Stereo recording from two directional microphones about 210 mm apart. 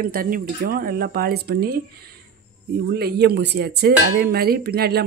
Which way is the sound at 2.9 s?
50° right (ahead or behind).